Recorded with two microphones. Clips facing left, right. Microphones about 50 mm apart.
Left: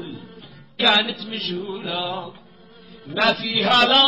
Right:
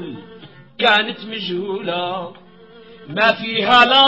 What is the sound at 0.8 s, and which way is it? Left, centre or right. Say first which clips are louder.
A man's voice: right 4 dB; right.